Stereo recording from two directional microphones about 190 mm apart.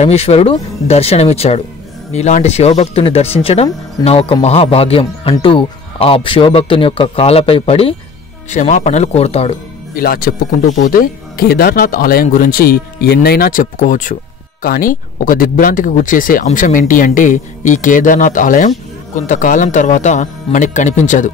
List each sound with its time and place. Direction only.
0.0 s speech: 35° left (ahead or behind)
8.5 s speech: 40° left (ahead or behind)
9.9 s speech: 50° left (ahead or behind)